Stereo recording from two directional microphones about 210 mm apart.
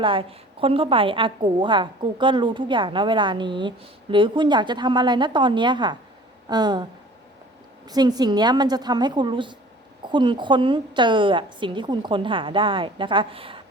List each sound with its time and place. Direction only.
0.0 s a woman's voice: 25° right (ahead or behind)
7.9 s a woman's voice: 20° right (ahead or behind)